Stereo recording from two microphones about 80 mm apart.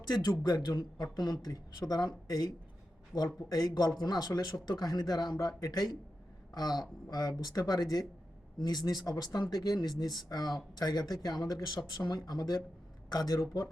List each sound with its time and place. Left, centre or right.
0.1 s speech: left
3.1 s speech: centre
3.5 s speech: left